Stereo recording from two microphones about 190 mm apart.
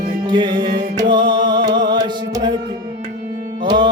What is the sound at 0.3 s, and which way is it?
Music, 25° right (ahead or behind).